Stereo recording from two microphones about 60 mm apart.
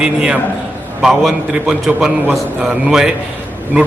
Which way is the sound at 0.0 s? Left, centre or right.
Centre.